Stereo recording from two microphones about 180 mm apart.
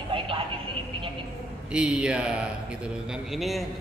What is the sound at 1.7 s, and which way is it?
A man's voice, 5° right (ahead or behind).